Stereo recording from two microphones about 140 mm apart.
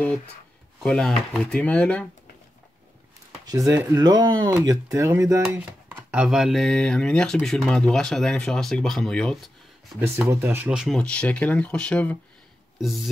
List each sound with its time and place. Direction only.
0.8 s speech: 5° left (ahead or behind)
3.4 s speech: 25° right (ahead or behind)
4.9 s speech: 20° right (ahead or behind)
5.5 s a sound: 15° right (ahead or behind)
6.2 s speech: 5° right (ahead or behind)
9.9 s speech: 20° right (ahead or behind)
11.0 s speech: 10° left (ahead or behind)
12.7 s speech: centre (ahead or behind)